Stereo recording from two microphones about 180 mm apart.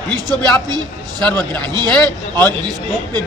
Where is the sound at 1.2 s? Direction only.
5° left (ahead or behind).